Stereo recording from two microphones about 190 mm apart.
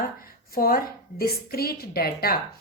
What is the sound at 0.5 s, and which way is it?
Speech, 50° left (ahead or behind).